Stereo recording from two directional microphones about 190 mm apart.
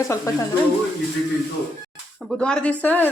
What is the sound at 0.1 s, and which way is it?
Speech, 15° left (ahead or behind).